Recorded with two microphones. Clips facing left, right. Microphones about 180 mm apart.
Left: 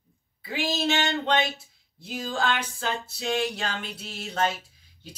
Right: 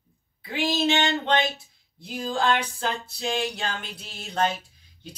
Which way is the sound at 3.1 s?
Centre (ahead or behind).